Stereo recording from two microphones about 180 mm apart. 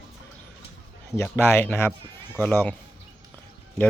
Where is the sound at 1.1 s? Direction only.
15° left (ahead or behind).